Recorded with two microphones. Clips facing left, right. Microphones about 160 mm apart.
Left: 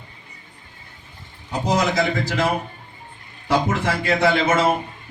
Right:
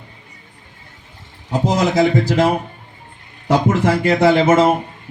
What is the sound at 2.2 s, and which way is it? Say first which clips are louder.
Speech: right 7 dB; 45° right (ahead or behind).